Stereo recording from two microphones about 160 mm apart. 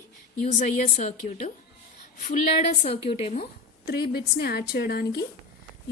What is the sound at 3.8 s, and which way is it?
A woman's voice, 85° left.